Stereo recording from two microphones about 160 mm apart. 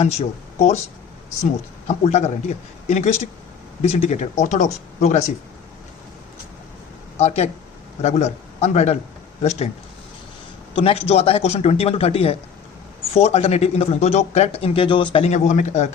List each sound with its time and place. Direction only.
0.0 s speech: 40° left (ahead or behind)
1.9 s speech: 45° left (ahead or behind)
7.2 s speech: 45° left (ahead or behind)
10.8 s speech: 40° left (ahead or behind)